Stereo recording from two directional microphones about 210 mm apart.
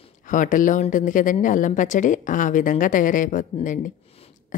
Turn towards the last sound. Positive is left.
turn(degrees=40)  # may be behind; listen again after turning